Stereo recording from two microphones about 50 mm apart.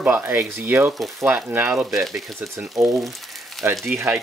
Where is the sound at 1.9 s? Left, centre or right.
Centre.